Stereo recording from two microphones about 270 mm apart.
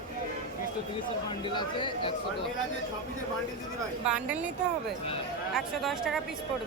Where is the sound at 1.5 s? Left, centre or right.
Centre.